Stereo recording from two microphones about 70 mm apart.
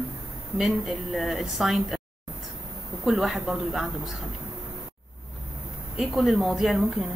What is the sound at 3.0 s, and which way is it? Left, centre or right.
Speech, centre.